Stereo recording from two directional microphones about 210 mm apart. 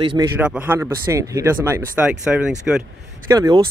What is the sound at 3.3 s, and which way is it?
Speech, 15° right (ahead or behind).